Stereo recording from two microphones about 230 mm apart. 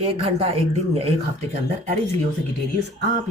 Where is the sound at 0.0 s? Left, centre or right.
Right.